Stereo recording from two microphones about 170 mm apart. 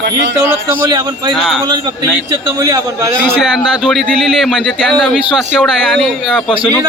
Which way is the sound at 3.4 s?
5° left (ahead or behind).